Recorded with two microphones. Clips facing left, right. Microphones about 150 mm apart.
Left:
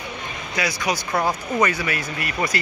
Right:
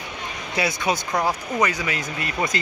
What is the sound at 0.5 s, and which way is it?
Speech, 25° right (ahead or behind).